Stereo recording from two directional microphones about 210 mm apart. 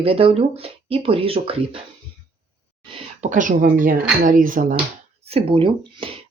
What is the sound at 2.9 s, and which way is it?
Speech, 35° right (ahead or behind).